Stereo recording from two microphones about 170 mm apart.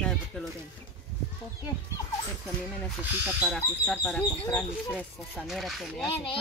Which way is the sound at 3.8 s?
5° left (ahead or behind).